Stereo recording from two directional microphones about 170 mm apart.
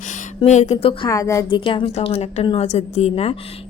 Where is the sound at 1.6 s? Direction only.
30° left (ahead or behind).